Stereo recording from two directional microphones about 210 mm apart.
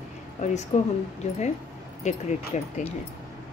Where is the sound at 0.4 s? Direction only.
35° left (ahead or behind).